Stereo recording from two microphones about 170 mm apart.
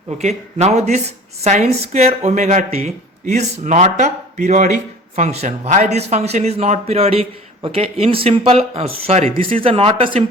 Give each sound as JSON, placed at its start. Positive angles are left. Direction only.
{"t": 0.2, "sound": "speech", "side_deg": -40}